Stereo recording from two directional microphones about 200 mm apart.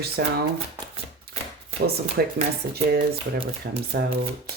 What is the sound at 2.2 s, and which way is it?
Speech, 50° right (ahead or behind).